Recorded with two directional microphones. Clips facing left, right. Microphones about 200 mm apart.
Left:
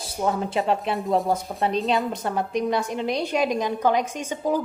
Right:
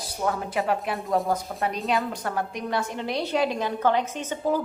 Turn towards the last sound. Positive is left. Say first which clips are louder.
# left 1 dB
turn(degrees=15)  # may be behind; listen again after turning